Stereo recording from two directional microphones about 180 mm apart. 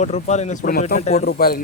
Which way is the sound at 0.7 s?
55° left (ahead or behind).